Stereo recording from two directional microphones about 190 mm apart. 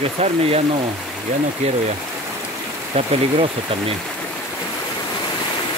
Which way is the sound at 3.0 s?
30° right (ahead or behind).